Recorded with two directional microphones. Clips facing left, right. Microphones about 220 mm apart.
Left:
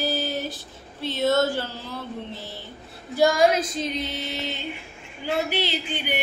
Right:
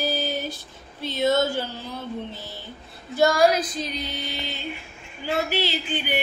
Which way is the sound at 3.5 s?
25° left (ahead or behind).